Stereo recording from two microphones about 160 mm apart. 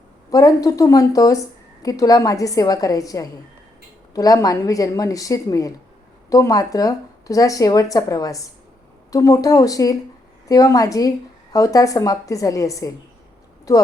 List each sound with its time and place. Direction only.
0.3 s speech: 20° left (ahead or behind)